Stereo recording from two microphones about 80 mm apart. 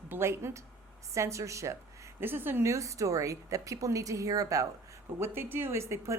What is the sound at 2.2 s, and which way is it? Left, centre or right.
Speech, right.